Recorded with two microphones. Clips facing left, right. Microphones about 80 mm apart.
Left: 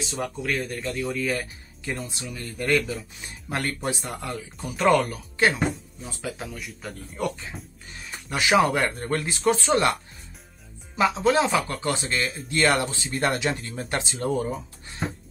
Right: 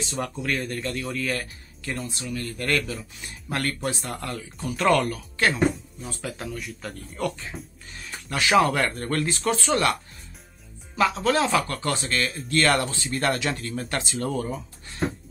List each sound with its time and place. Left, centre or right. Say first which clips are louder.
0.1 s a man's voice: even; centre; by 3.7 s left
3.8 s a man's voice: even; centre
8.3 s a man's voice: even; centre
11.0 s a man's voice: left 1 dB; centre
14.3 s a man's voice: left 5 dB; centre